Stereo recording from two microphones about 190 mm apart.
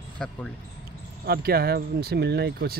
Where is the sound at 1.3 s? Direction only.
55° right (ahead or behind).